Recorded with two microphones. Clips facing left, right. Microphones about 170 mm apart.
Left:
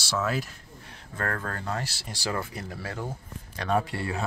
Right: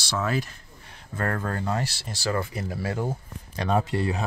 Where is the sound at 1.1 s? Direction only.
15° right (ahead or behind).